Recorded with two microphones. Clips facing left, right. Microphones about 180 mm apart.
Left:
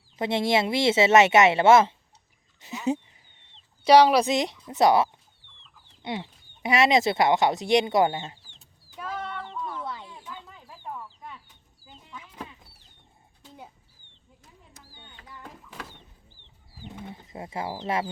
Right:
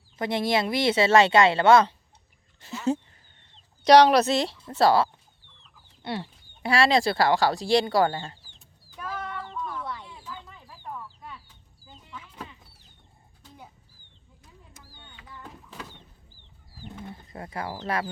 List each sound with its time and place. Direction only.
0.2 s a woman's voice: 25° left (ahead or behind)
9.0 s child singing: 20° left (ahead or behind)
11.9 s a sound: 10° left (ahead or behind)
16.8 s speech: 20° left (ahead or behind)